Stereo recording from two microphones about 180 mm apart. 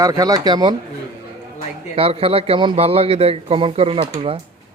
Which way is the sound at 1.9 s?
30° right (ahead or behind).